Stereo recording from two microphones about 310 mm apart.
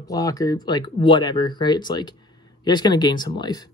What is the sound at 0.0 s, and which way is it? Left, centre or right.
Speech, centre.